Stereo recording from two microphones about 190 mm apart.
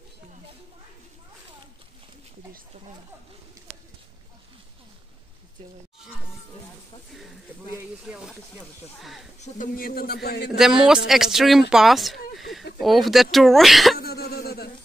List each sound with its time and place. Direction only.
8.1 s speech: 5° right (ahead or behind)
9.4 s speech: 45° left (ahead or behind)
10.6 s speech: 5° right (ahead or behind)
13.9 s throat clearing: 55° left (ahead or behind)